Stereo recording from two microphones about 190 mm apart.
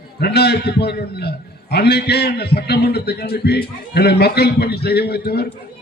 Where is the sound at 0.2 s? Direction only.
60° left (ahead or behind).